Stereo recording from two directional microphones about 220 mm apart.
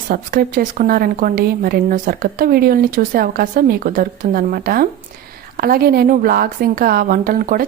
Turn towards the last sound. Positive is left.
turn(degrees=-40)  # may be behind; listen again after turning